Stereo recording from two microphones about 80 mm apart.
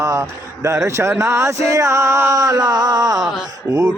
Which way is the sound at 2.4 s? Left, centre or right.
Right.